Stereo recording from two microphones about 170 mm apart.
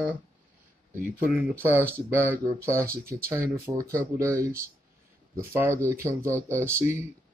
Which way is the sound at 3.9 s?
15° right (ahead or behind).